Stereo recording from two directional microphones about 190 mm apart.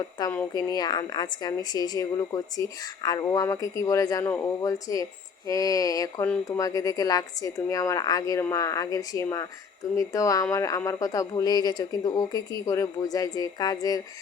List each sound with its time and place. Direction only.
0.0 s a woman's voice: 20° left (ahead or behind)